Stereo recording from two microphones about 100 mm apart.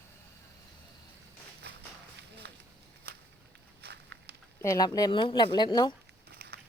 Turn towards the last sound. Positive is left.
turn(degrees=45)  # may be behind; listen again after turning